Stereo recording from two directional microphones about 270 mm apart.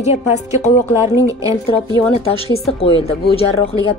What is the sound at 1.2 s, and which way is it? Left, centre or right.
Speech, centre.